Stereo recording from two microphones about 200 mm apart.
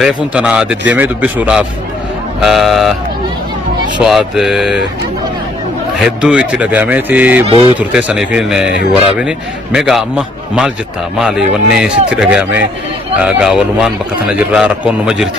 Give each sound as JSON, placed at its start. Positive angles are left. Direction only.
{"t": 0.0, "sound": "speech", "side_deg": -5}
{"t": 4.0, "sound": "speech", "side_deg": 0}
{"t": 5.9, "sound": "speech", "side_deg": -5}